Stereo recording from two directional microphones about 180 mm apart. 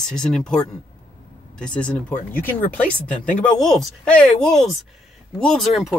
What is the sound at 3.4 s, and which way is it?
Speech, 5° left (ahead or behind).